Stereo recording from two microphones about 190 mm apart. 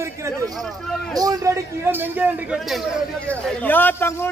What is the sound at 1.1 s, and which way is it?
A man's voice, 20° right (ahead or behind).